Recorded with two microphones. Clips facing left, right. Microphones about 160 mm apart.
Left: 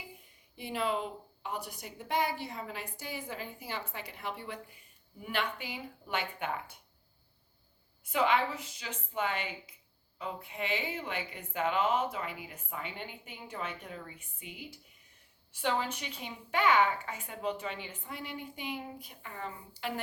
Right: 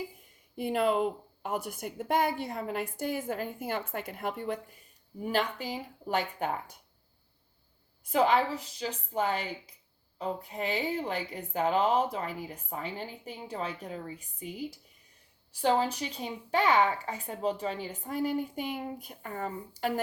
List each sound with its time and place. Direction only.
0.5 s a woman's voice: 50° right (ahead or behind)
8.1 s speech: 35° right (ahead or behind)